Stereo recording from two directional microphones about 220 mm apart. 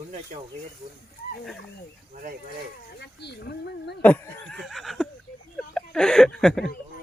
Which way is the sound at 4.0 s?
5° left (ahead or behind).